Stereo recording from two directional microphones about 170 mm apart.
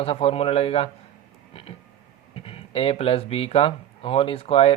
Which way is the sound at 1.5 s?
35° left (ahead or behind).